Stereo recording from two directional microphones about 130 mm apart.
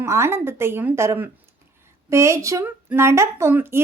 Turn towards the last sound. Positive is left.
turn(degrees=-20)  # may be behind; listen again after turning